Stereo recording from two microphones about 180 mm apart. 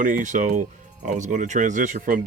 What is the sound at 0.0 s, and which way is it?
Speech, 45° right (ahead or behind).